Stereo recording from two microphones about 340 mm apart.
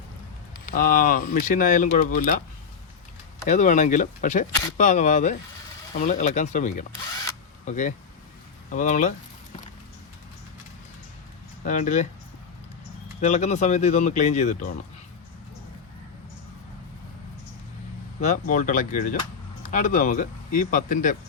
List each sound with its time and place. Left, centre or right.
0.7 s speech: left
3.5 s speech: left
11.6 s speech: left
13.2 s speech: left
18.2 s speech: left